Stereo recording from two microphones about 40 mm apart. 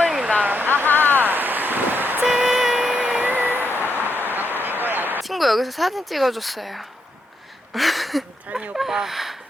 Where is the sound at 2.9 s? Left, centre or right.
Right.